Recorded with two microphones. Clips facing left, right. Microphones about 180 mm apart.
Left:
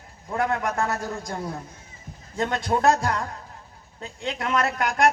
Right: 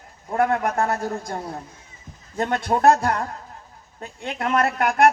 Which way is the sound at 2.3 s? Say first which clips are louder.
Right 2 dB; 55° right (ahead or behind).